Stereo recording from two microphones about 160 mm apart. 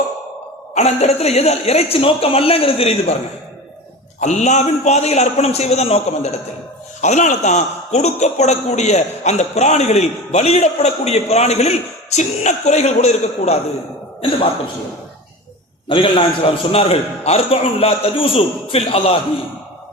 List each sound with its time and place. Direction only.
0.7 s a man's voice: 45° left (ahead or behind)
4.2 s a man's voice: 45° left (ahead or behind)
15.9 s a man's voice: 30° left (ahead or behind)